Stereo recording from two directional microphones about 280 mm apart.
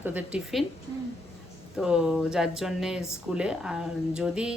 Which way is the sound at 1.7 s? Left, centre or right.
Centre.